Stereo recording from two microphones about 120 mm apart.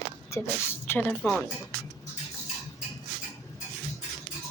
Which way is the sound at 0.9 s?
15° left (ahead or behind).